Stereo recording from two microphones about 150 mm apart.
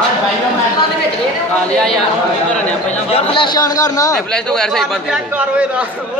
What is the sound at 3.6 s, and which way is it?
Speech, 25° left (ahead or behind).